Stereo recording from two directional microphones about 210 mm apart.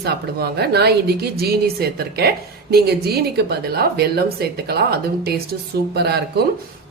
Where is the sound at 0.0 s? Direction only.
50° right (ahead or behind).